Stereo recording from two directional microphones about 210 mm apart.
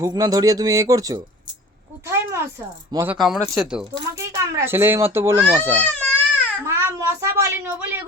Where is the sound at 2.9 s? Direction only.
15° right (ahead or behind).